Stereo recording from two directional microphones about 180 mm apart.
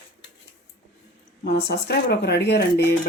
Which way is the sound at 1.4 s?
65° left (ahead or behind).